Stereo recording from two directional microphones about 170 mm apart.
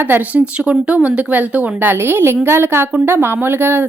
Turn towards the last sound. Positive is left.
turn(degrees=-15)  # may be behind; listen again after turning